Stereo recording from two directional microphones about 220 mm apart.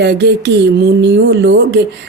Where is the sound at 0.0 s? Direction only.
50° right (ahead or behind).